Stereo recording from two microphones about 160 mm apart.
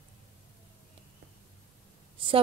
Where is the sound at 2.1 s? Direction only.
35° right (ahead or behind).